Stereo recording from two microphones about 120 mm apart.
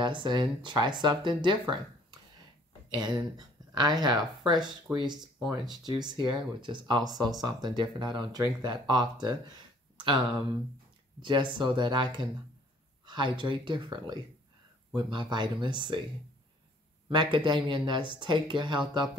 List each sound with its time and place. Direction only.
0.0 s speech: 40° right (ahead or behind)
2.9 s speech: 35° right (ahead or behind)
17.1 s speech: 40° right (ahead or behind)